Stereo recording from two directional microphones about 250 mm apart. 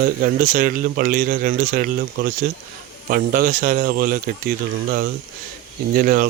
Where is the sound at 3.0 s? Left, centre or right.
Right.